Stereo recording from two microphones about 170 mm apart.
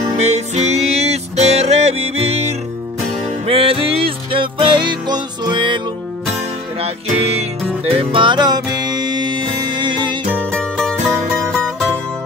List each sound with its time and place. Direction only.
0.1 s music: 40° right (ahead or behind)
6.8 s music: 35° right (ahead or behind)
10.4 s music: 5° left (ahead or behind)